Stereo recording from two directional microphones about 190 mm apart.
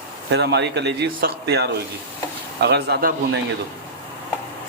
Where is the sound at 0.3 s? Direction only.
60° right (ahead or behind).